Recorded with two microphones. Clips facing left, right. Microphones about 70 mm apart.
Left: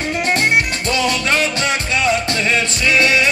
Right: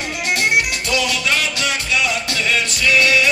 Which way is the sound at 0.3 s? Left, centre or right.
Left.